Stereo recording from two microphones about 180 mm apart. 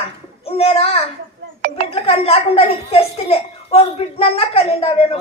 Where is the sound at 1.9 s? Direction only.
35° left (ahead or behind).